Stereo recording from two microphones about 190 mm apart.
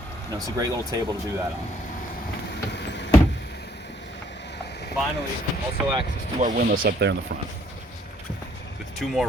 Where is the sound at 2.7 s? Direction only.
65° left (ahead or behind).